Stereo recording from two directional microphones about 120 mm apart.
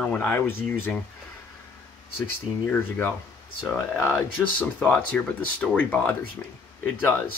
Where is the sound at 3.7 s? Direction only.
15° left (ahead or behind).